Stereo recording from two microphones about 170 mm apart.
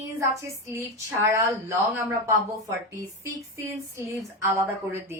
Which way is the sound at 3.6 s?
15° right (ahead or behind).